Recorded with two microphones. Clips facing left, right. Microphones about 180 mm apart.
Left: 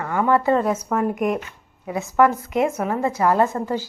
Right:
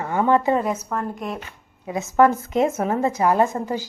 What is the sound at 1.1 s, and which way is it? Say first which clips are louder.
Speech: left 8 dB; 15° left (ahead or behind).